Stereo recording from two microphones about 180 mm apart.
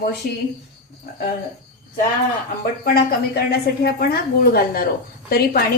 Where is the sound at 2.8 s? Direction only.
60° left (ahead or behind).